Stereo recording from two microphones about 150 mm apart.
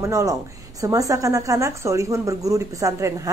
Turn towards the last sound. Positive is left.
turn(degrees=-20)  # may be behind; listen again after turning